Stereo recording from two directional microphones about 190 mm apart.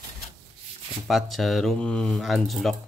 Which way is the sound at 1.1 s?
Centre (ahead or behind).